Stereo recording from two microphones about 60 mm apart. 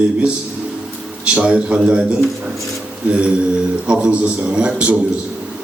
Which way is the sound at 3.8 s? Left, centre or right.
Centre.